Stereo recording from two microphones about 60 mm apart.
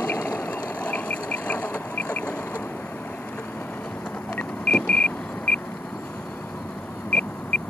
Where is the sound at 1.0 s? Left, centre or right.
Left.